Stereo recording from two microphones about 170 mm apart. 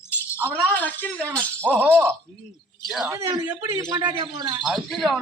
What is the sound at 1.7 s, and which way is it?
A man's voice, 10° right (ahead or behind).